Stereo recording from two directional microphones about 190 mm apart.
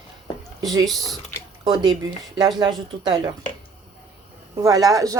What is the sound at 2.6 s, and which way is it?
Speech, 20° right (ahead or behind).